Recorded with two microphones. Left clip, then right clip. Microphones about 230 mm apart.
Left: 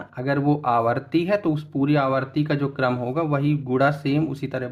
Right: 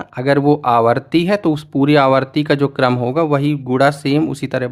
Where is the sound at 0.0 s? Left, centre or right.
Right.